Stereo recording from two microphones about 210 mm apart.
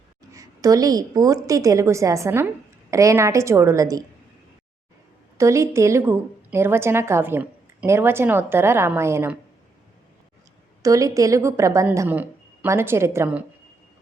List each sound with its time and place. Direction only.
0.3 s a woman's voice: 15° right (ahead or behind)
5.4 s a woman's voice: 15° right (ahead or behind)
10.8 s a woman's voice: 15° right (ahead or behind)